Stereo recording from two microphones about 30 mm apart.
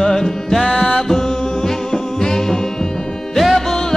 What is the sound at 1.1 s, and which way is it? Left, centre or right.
Music, centre.